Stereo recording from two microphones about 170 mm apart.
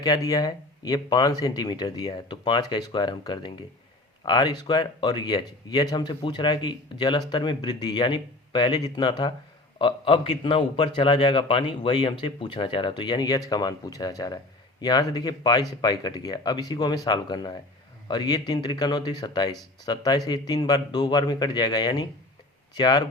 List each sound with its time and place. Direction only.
0.0 s speech: 20° left (ahead or behind)